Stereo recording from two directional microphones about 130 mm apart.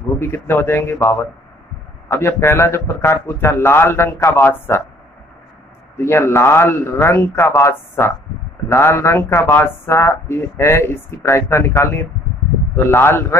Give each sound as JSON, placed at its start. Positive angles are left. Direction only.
{"t": 0.2, "sound": "speech", "side_deg": 20}
{"t": 5.9, "sound": "speech", "side_deg": 20}